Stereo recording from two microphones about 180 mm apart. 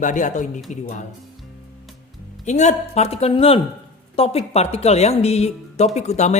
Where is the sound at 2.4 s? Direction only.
40° left (ahead or behind).